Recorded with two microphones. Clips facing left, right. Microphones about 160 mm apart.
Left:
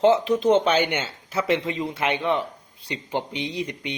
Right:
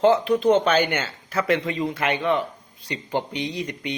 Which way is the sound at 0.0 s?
20° left (ahead or behind).